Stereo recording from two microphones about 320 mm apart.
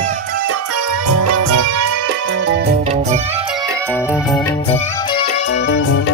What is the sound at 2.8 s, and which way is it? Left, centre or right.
Music, centre.